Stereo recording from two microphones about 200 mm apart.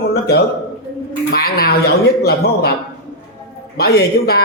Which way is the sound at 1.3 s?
50° left (ahead or behind).